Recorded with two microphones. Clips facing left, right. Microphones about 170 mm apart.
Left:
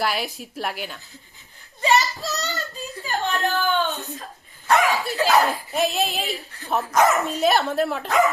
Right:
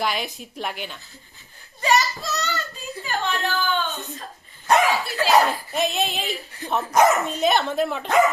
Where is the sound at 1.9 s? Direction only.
Centre (ahead or behind).